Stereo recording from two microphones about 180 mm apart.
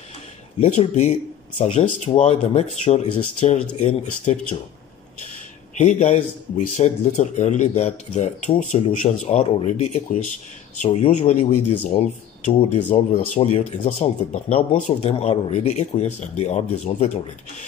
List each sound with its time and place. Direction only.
0.6 s speech: 40° left (ahead or behind)
5.8 s a man's voice: 40° left (ahead or behind)
12.9 s speech: 40° left (ahead or behind)